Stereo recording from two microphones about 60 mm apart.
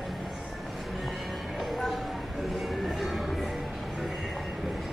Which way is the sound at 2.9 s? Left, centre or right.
Centre.